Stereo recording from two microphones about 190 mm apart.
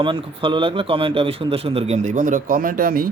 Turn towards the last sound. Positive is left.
turn(degrees=-50)  # may be behind; listen again after turning